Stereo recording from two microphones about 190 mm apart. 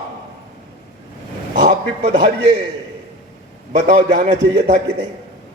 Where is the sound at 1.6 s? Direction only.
35° right (ahead or behind).